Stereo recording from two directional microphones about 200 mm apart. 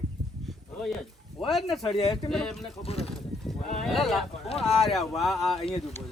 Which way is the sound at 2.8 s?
30° left (ahead or behind).